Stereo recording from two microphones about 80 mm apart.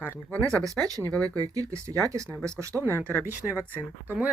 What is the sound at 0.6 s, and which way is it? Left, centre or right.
Speech, right.